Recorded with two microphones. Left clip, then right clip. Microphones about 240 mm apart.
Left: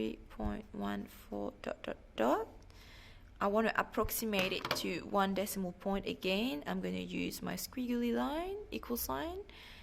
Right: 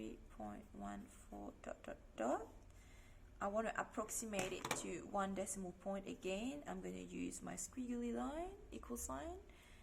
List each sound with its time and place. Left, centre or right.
0.0 s speech: left